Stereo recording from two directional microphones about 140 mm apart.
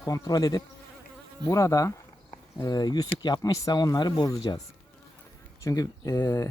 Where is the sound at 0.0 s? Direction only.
25° left (ahead or behind).